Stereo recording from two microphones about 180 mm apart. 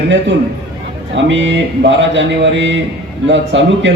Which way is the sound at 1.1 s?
90° right.